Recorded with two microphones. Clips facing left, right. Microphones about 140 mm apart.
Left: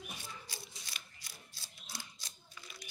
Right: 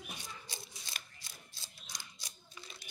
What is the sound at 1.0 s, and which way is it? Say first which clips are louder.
Scissors: right 4 dB; 50° right (ahead or behind).